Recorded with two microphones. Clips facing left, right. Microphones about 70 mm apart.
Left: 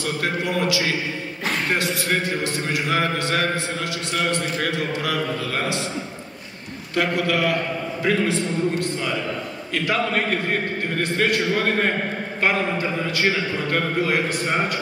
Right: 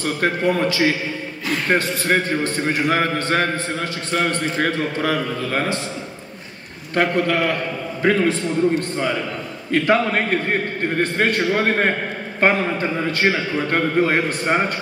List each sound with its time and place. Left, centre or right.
0.2 s a man's voice: right
7.0 s a man's voice: right
12.4 s a man's voice: right